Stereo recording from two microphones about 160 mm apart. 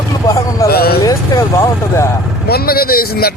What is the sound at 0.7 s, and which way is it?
Vehicle, 75° left (ahead or behind).